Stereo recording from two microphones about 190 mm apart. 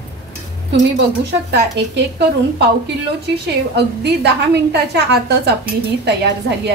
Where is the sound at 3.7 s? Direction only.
60° right (ahead or behind).